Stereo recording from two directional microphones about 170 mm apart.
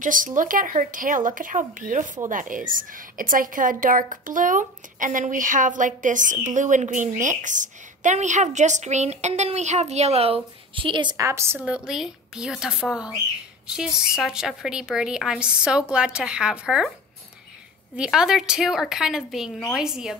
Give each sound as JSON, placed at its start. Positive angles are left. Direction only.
{"t": 0.0, "sound": "a woman's voice", "side_deg": -50}
{"t": 17.9, "sound": "a woman's voice", "side_deg": -5}